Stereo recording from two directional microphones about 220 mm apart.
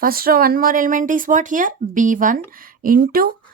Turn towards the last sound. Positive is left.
turn(degrees=-40)  # may be behind; listen again after turning